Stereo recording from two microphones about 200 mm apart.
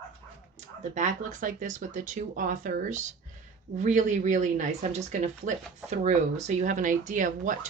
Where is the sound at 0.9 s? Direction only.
40° right (ahead or behind).